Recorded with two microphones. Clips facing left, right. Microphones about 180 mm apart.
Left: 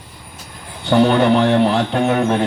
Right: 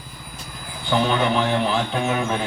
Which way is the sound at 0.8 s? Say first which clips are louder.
Left 7 dB; 65° left (ahead or behind).